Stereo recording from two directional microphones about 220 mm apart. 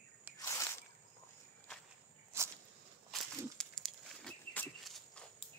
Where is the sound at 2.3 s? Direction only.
10° right (ahead or behind).